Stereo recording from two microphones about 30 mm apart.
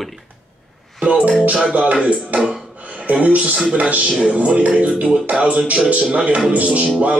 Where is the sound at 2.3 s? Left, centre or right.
Right.